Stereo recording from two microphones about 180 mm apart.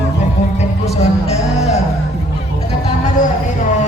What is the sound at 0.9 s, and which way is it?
Music, 35° left (ahead or behind).